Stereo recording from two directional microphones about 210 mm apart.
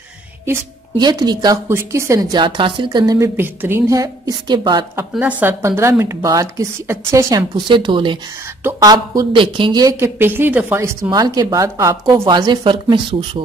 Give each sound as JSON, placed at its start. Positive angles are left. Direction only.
{"t": 0.5, "sound": "a woman's voice", "side_deg": -20}
{"t": 5.1, "sound": "a woman's voice", "side_deg": -10}